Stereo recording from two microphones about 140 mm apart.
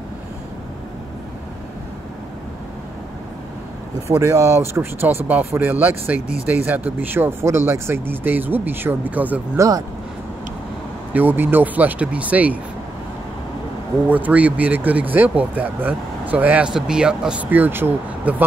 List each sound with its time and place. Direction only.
4.1 s speech: 20° right (ahead or behind)
9.6 s speech: 25° right (ahead or behind)
11.1 s speech: 15° right (ahead or behind)
14.0 s speech: 10° right (ahead or behind)